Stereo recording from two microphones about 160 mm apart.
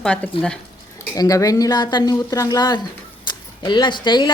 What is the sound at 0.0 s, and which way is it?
Speech, 5° left (ahead or behind).